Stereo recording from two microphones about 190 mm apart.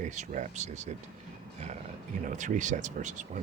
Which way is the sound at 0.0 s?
40° right (ahead or behind).